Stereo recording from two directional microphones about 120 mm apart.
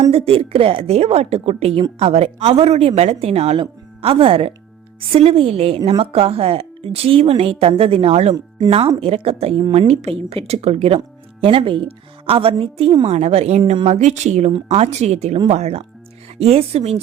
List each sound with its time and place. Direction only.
0.1 s a woman's voice: 50° right (ahead or behind)
9.0 s a woman's voice: 55° right (ahead or behind)